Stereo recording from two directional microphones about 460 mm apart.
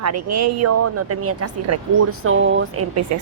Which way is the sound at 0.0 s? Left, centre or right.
Right.